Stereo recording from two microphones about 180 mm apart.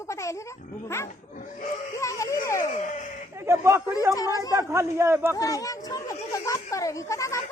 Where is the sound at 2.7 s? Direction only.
45° left (ahead or behind).